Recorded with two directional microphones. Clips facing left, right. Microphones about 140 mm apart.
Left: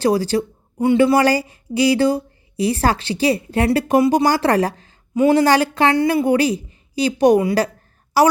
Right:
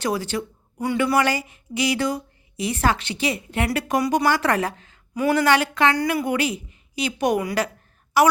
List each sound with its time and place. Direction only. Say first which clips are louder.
0.0 s a woman's voice: left 8 dB; 35° left (ahead or behind)